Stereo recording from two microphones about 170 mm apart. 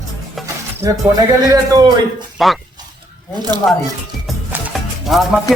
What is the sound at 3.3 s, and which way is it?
Speech, 25° right (ahead or behind).